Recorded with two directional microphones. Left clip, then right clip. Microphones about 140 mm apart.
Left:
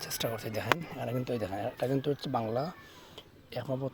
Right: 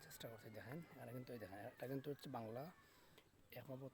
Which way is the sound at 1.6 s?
Centre (ahead or behind).